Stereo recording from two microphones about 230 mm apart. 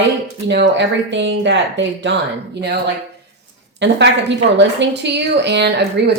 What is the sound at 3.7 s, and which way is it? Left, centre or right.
Speech, right.